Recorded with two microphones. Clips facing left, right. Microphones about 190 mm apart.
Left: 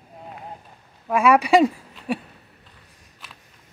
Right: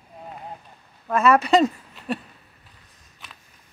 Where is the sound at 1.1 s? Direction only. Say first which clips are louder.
Left 1 dB; 10° left (ahead or behind).